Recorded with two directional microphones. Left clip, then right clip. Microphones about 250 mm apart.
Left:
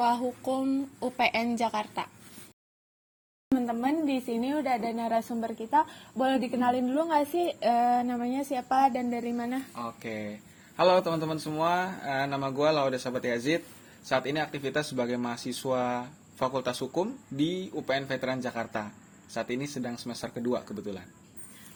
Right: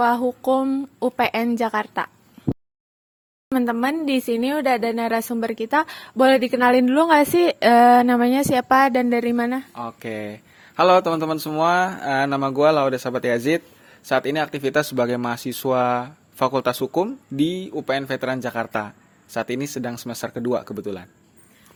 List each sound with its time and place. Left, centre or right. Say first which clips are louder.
0.0 s a woman's voice: right 8 dB; right
3.7 s a woman's voice: right 8 dB; right